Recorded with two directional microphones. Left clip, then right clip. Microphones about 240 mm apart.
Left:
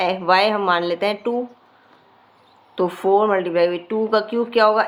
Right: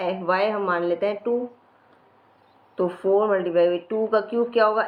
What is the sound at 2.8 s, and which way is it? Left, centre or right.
Speech, left.